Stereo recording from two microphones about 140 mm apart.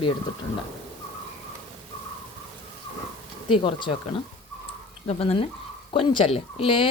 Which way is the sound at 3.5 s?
35° left (ahead or behind).